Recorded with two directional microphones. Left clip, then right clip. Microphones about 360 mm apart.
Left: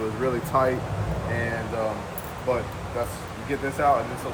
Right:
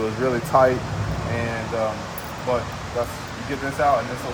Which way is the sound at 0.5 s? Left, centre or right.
Centre.